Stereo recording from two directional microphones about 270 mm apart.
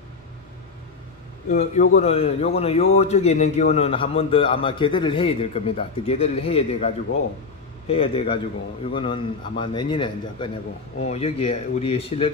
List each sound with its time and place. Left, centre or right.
1.5 s a man's voice: left